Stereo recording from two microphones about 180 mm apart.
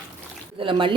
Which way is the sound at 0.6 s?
30° right (ahead or behind).